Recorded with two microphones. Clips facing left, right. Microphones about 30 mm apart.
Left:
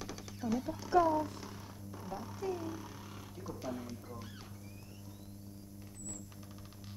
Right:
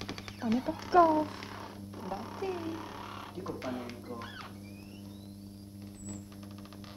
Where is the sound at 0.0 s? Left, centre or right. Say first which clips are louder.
Right 4 dB; right.